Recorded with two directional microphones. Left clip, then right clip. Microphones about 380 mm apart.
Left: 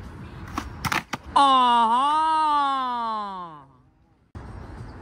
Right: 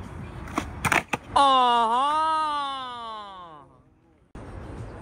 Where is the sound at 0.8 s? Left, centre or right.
Centre.